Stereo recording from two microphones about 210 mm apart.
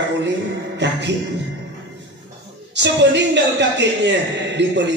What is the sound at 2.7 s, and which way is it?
A man's voice, 55° right (ahead or behind).